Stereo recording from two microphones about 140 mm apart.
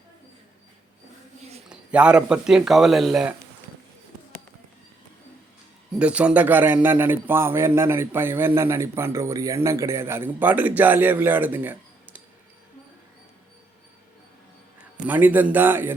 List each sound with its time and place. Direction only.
1.4 s a sound: 50° right (ahead or behind)
1.7 s speech: 10° right (ahead or behind)
5.9 s a man's voice: 10° right (ahead or behind)
15.0 s a man's voice: 10° right (ahead or behind)